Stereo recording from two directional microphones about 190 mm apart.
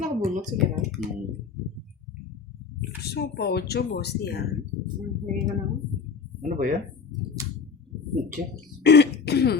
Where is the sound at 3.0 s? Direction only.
60° left (ahead or behind).